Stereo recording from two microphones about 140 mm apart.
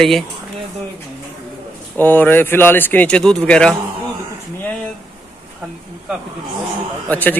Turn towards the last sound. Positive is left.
turn(degrees=10)  # may be behind; listen again after turning